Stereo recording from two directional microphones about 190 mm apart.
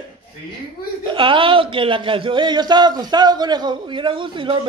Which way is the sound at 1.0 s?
25° right (ahead or behind).